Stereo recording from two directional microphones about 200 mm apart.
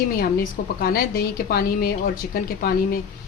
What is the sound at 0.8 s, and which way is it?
A woman's voice, 45° left (ahead or behind).